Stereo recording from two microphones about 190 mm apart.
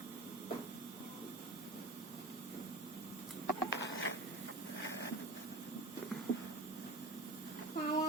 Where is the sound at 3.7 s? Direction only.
65° left (ahead or behind).